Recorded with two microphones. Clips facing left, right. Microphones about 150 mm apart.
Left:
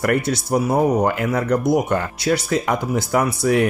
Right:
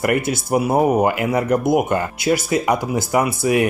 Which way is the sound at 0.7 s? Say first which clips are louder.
Right 1 dB; 25° right (ahead or behind).